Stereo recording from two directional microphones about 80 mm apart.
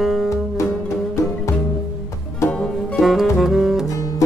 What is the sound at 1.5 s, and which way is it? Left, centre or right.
Music, left.